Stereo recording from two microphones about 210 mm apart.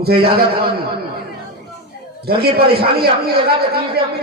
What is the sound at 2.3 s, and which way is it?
A man's voice, 45° right (ahead or behind).